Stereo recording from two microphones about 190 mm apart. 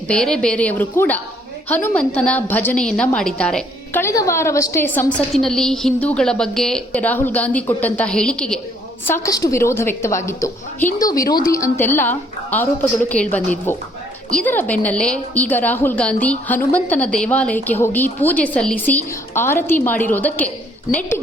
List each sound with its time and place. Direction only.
0.1 s a woman's voice: 5° left (ahead or behind)